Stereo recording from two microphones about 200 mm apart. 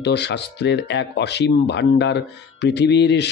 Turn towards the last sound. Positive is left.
turn(degrees=60)  # may be behind; listen again after turning